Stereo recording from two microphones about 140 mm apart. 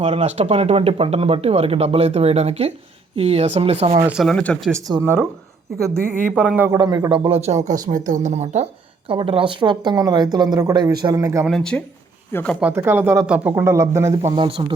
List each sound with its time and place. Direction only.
0.0 s speech: 45° right (ahead or behind)
4.1 s speech: centre (ahead or behind)
4.9 s speech: 25° right (ahead or behind); by 6.7 s 10° right (ahead or behind)
6.7 s speech: 25° right (ahead or behind)
7.1 s speech: 40° right (ahead or behind)
7.9 s speech: 65° right (ahead or behind)
9.0 s a woman's voice: 40° right (ahead or behind); by 11.4 s 20° right (ahead or behind)
11.4 s speech: 5° left (ahead or behind)
12.5 s speech: 15° right (ahead or behind)
14.2 s a woman's voice: 45° right (ahead or behind)